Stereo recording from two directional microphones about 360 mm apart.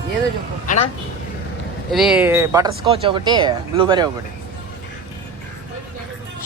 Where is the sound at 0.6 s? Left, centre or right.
Left.